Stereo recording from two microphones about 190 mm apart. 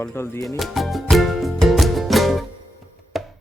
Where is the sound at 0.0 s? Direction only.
15° left (ahead or behind).